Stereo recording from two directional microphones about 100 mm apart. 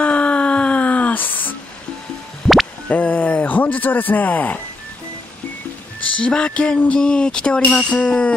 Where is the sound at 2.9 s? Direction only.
15° left (ahead or behind).